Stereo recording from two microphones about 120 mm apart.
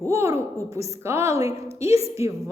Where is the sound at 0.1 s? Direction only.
25° right (ahead or behind).